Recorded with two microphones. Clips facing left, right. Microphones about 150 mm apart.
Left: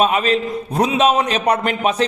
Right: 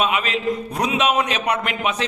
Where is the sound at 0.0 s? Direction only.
35° left (ahead or behind).